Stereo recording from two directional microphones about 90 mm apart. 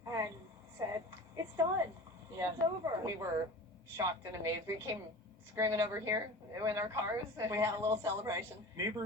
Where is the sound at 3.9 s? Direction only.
30° right (ahead or behind).